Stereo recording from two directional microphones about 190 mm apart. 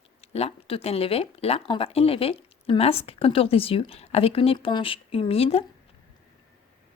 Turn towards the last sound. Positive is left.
turn(degrees=30)  # may be behind; listen again after turning